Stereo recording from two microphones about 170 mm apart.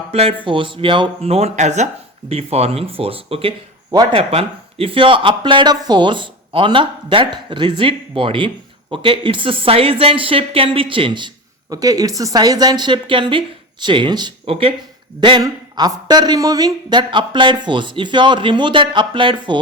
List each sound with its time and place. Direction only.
0.1 s speech: 35° right (ahead or behind)